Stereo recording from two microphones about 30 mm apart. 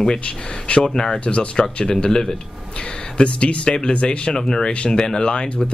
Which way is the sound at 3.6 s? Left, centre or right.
Left.